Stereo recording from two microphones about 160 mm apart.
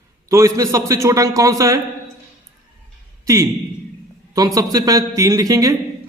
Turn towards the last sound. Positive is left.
turn(degrees=-20)  # may be behind; listen again after turning